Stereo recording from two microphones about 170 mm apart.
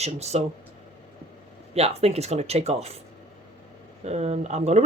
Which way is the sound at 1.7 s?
35° right (ahead or behind).